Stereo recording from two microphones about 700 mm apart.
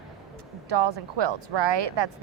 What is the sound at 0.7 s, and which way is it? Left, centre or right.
A woman's voice, right.